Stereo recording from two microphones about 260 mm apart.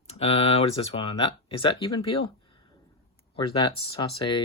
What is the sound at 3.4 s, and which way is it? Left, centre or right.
Speech, centre.